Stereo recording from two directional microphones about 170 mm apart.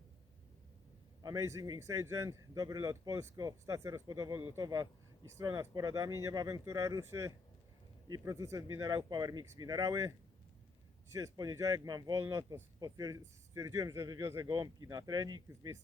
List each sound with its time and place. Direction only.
1.2 s speech: 20° right (ahead or behind)